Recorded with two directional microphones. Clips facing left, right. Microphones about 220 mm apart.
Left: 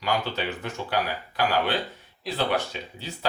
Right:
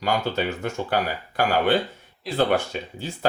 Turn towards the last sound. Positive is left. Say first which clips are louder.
# right 7 dB
turn(degrees=-50)  # may be behind; listen again after turning